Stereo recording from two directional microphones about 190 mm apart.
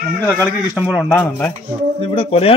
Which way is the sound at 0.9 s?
Centre (ahead or behind).